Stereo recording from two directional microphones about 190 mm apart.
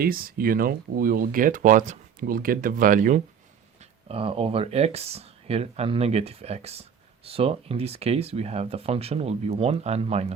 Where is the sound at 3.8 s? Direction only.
30° right (ahead or behind).